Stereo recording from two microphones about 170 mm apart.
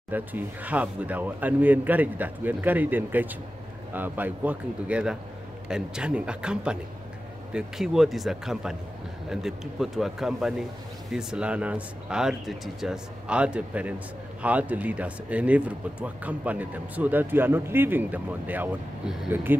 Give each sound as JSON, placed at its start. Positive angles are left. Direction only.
{"t": 0.1, "sound": "speech", "side_deg": -10}